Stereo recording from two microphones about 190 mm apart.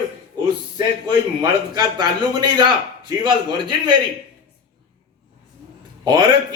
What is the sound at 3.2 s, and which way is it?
Speech, 25° right (ahead or behind).